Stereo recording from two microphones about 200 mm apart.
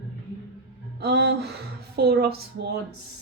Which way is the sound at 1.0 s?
55° right (ahead or behind).